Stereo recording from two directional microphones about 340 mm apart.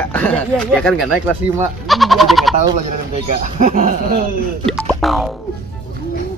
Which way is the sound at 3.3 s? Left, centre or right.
Right.